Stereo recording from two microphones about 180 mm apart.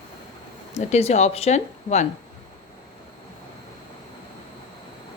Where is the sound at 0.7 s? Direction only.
40° left (ahead or behind).